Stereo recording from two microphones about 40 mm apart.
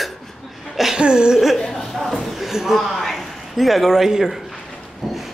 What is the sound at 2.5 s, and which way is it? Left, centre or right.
Speech, centre.